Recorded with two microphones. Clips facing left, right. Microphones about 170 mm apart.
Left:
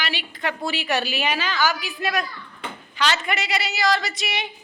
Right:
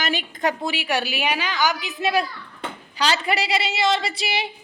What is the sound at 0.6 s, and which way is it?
A woman's voice, 15° right (ahead or behind).